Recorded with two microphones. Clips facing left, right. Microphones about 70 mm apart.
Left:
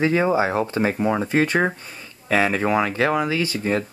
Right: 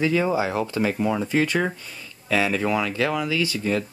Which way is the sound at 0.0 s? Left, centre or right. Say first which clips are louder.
Left 3 dB; left.